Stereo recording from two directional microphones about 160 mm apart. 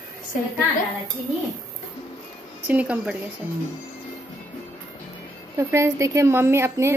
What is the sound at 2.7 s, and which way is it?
Speech, 5° right (ahead or behind).